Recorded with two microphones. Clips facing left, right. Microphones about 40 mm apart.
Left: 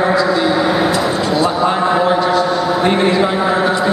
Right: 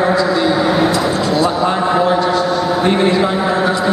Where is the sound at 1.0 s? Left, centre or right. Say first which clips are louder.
Even; centre.